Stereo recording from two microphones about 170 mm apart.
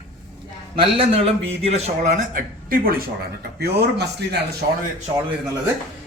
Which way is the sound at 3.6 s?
75° right (ahead or behind).